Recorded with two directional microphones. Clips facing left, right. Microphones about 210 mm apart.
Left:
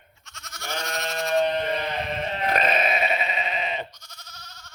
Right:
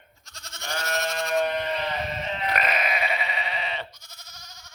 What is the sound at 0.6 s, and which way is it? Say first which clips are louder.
Goat: left 1 dB; 15° right (ahead or behind).